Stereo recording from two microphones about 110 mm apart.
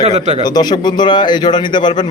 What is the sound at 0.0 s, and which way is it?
Speech, 75° right (ahead or behind).